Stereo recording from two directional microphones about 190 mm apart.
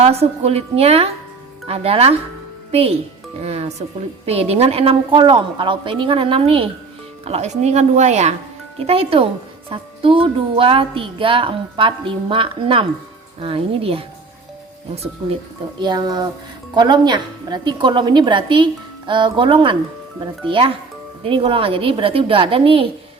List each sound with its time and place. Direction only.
0.0 s a woman's voice: 35° right (ahead or behind)
15.8 s speech: 20° right (ahead or behind)